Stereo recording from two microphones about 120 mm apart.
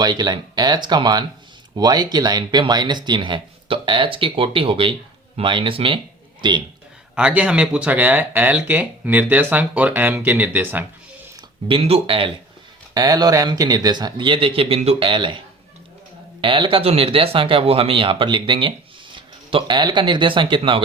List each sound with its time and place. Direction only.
0.0 s speech: 35° right (ahead or behind)
7.2 s speech: 10° right (ahead or behind)
11.7 s speech: 50° right (ahead or behind)
12.9 s speech: 30° right (ahead or behind)
16.4 s speech: 45° right (ahead or behind)